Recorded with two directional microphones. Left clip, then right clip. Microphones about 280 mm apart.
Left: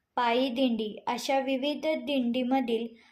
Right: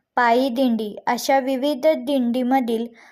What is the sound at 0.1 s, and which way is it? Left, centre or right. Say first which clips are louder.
A woman's voice: right 9 dB; right.